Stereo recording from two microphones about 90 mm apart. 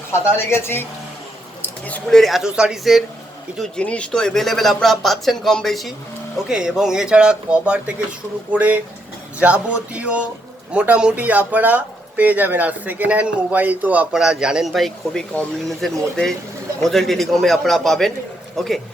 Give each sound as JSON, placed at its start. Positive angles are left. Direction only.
{"t": 0.1, "sound": "speech", "side_deg": 30}
{"t": 1.6, "sound": "squish", "side_deg": 15}
{"t": 2.0, "sound": "speech", "side_deg": 0}
{"t": 3.6, "sound": "speech", "side_deg": 10}